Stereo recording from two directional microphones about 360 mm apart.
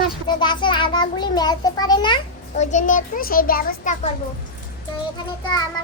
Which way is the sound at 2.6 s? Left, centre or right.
Centre.